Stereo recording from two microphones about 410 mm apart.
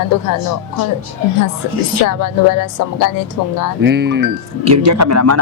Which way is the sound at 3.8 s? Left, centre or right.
Right.